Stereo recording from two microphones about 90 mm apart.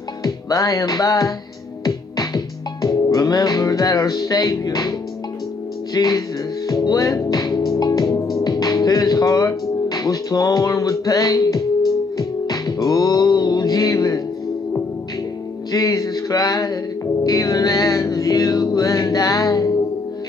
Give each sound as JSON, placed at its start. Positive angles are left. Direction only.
{"t": 0.2, "sound": "music", "side_deg": 40}
{"t": 5.9, "sound": "speech", "side_deg": 40}
{"t": 6.7, "sound": "music", "side_deg": 45}
{"t": 15.7, "sound": "a sound", "side_deg": 40}
{"t": 17.2, "sound": "music", "side_deg": 40}